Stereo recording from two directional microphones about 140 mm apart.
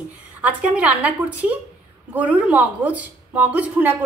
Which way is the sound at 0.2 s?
10° right (ahead or behind).